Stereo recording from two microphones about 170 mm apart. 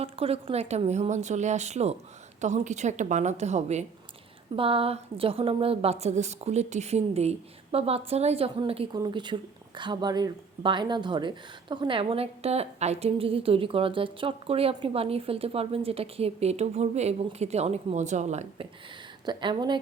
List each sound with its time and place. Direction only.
0.0 s a woman's voice: 35° right (ahead or behind)
19.2 s a woman's voice: 25° right (ahead or behind)